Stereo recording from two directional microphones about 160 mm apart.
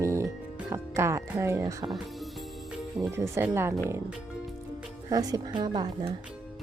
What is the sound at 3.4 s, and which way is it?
Speech, 15° right (ahead or behind).